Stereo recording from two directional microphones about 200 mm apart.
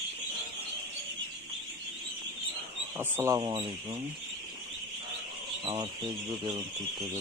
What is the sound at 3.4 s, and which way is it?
Speech, 25° right (ahead or behind).